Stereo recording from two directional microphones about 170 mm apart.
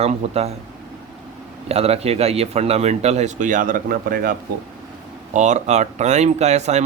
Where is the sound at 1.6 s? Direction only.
35° right (ahead or behind).